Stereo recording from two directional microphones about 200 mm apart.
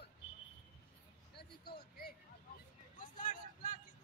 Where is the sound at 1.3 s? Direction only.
50° left (ahead or behind).